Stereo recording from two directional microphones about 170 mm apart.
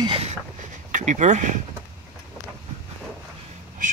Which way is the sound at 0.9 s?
45° right (ahead or behind).